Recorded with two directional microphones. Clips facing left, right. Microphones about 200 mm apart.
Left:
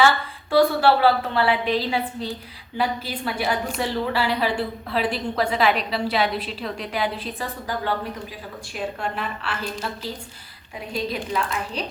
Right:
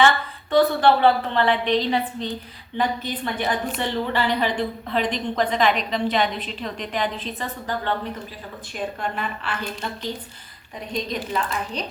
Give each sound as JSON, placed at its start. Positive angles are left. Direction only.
{"t": 0.5, "sound": "a woman's voice", "side_deg": 5}